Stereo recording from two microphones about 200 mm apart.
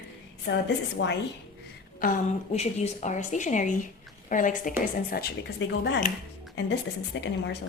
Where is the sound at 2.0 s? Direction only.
40° left (ahead or behind).